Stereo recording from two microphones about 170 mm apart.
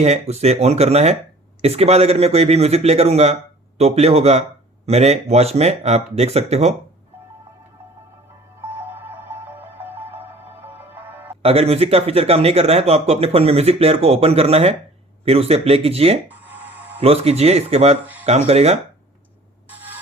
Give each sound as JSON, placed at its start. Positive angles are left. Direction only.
{"t": 0.0, "sound": "speech", "side_deg": -40}
{"t": 8.6, "sound": "music", "side_deg": -10}
{"t": 11.4, "sound": "speech", "side_deg": -35}
{"t": 16.3, "sound": "music", "side_deg": -10}
{"t": 17.0, "sound": "speech", "side_deg": -35}
{"t": 18.0, "sound": "a sound", "side_deg": -10}
{"t": 18.3, "sound": "speech", "side_deg": -40}
{"t": 19.7, "sound": "a sound", "side_deg": -10}